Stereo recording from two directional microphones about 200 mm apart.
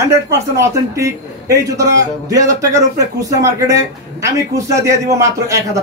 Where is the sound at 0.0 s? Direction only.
15° right (ahead or behind).